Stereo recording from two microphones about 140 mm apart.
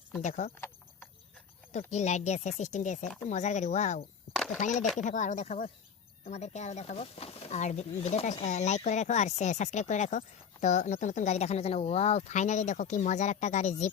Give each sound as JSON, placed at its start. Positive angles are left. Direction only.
{"t": 0.2, "sound": "speech", "side_deg": 60}
{"t": 1.9, "sound": "speech", "side_deg": 55}